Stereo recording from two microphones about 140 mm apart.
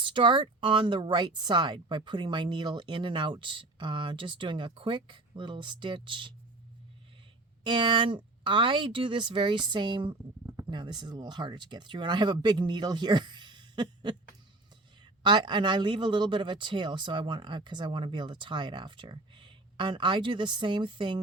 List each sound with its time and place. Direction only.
0.0 s speech: 35° right (ahead or behind)
7.6 s speech: 35° right (ahead or behind)